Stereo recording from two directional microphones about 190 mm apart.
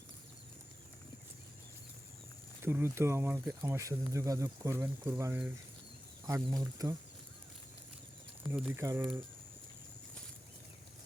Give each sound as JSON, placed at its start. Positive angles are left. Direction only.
{"t": 2.6, "sound": "speech", "side_deg": -10}
{"t": 8.5, "sound": "speech", "side_deg": -10}